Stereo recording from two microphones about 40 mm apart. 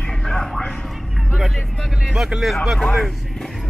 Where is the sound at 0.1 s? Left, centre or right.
Centre.